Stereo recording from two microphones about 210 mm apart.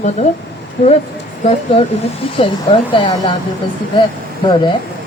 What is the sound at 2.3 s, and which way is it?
A woman's voice, 25° left (ahead or behind).